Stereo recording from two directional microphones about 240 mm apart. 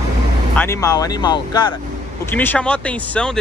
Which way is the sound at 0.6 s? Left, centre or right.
Centre.